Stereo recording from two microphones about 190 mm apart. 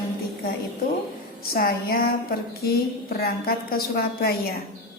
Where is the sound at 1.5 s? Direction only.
55° left (ahead or behind).